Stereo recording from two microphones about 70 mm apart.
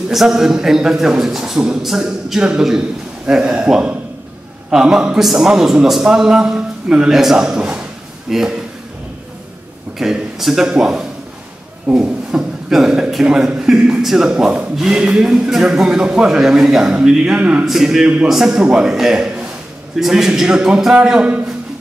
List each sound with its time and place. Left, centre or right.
0.1 s a man's voice: centre
9.9 s a man's voice: centre
17.6 s a man's voice: centre